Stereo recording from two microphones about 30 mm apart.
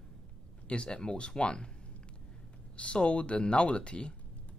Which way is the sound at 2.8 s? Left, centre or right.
Left.